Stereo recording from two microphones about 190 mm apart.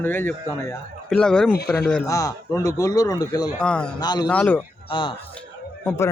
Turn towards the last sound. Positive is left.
turn(degrees=15)  # may be behind; listen again after turning